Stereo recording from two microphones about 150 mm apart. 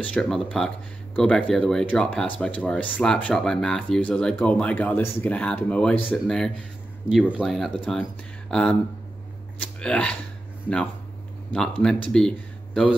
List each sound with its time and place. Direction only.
0.0 s speech: 5° left (ahead or behind)
11.5 s speech: 5° left (ahead or behind)